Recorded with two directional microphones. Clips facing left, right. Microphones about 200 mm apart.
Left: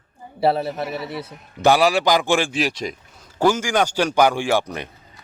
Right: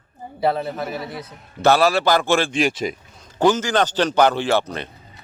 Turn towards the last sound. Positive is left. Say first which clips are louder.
# right 1 dB
turn(degrees=10)  # may be behind; listen again after turning